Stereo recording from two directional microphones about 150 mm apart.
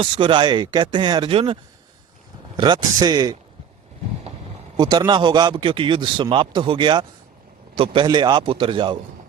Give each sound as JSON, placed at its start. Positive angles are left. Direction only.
{"t": 0.0, "sound": "speech", "side_deg": -35}
{"t": 2.6, "sound": "speech", "side_deg": -30}
{"t": 4.8, "sound": "speech", "side_deg": -30}